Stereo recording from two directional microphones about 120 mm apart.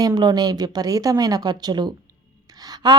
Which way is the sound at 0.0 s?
35° right (ahead or behind).